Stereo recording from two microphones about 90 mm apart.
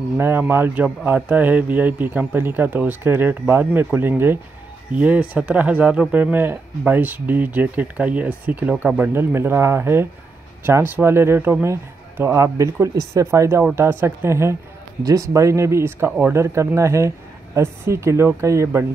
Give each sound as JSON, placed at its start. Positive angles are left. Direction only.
{"t": 0.2, "sound": "speech", "side_deg": -25}